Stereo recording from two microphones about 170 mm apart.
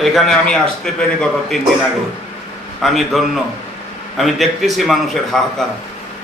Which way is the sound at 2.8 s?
Centre (ahead or behind).